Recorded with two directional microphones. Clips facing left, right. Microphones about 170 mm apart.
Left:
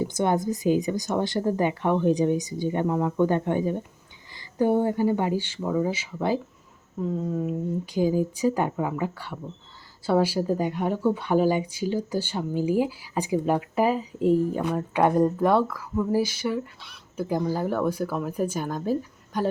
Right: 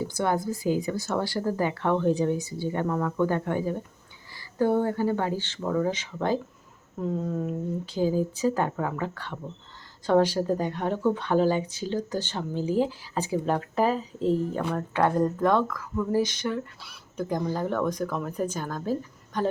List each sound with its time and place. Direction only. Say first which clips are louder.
0.0 s speech: left 3 dB; 20° left (ahead or behind)